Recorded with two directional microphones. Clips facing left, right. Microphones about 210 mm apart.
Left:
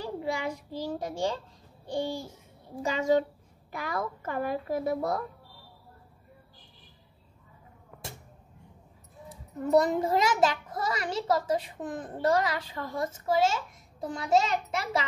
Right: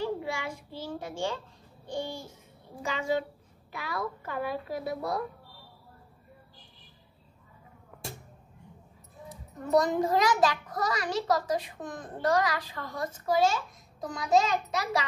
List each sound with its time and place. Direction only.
0.0 s a child's voice: 40° left (ahead or behind)
9.7 s a child's voice: 30° left (ahead or behind)